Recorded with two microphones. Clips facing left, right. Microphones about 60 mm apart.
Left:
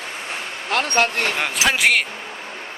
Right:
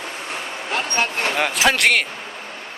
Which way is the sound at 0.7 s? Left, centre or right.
Left.